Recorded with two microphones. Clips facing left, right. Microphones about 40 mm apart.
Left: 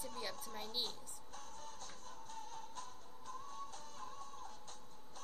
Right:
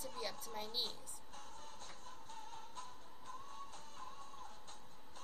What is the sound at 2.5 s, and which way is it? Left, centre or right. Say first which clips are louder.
Music: left 1 dB; right.